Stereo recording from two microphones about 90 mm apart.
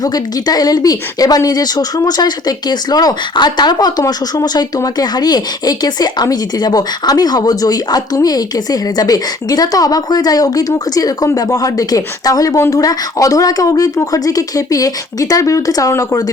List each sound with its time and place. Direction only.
0.0 s speech: 45° left (ahead or behind)